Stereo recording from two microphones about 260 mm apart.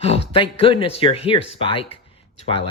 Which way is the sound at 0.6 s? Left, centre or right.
Left.